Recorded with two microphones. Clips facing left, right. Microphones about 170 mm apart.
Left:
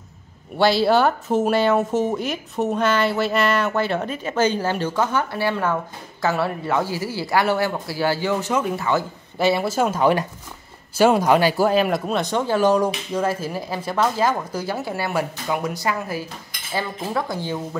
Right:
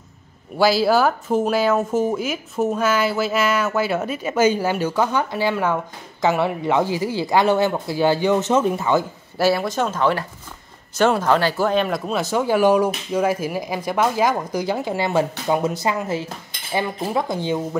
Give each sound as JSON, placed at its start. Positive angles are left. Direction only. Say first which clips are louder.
{"t": 0.6, "sound": "speech", "louder": "even", "side_deg": 0}
{"t": 9.4, "sound": "speech", "louder": "even", "side_deg": 0}